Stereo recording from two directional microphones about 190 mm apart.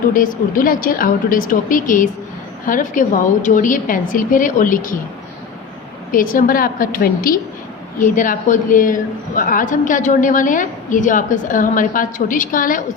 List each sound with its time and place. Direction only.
0.1 s a woman's voice: 45° left (ahead or behind)
6.1 s a woman's voice: 45° left (ahead or behind)